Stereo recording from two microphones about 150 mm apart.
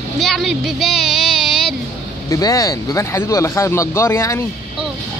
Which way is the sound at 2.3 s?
20° left (ahead or behind).